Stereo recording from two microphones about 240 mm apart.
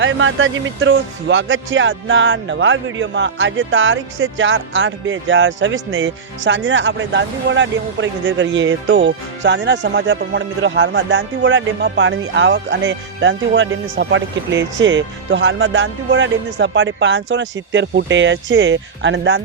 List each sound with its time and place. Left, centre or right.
0.0 s a man's voice: right